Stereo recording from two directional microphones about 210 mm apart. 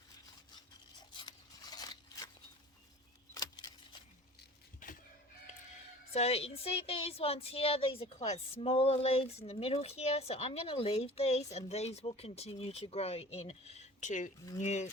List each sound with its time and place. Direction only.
1.7 s scissors: 20° left (ahead or behind)
3.3 s a sound: 15° left (ahead or behind)
4.8 s chicken: 40° left (ahead or behind)
6.1 s speech: 30° left (ahead or behind)